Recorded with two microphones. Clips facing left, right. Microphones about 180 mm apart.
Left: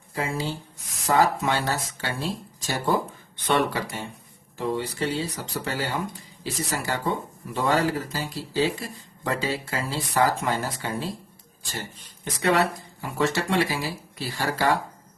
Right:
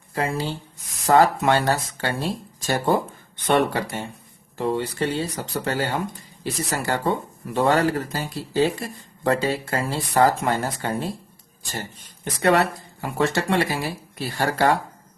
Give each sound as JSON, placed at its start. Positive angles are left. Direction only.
{"t": 1.0, "sound": "speech", "side_deg": -60}